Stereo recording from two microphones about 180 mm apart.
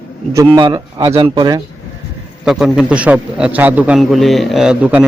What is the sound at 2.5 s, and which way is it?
A man's voice, centre (ahead or behind).